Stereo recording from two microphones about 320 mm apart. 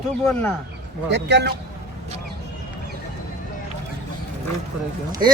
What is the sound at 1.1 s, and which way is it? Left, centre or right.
Speech, right.